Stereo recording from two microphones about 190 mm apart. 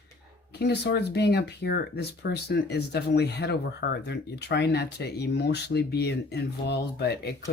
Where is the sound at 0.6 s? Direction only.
60° left (ahead or behind).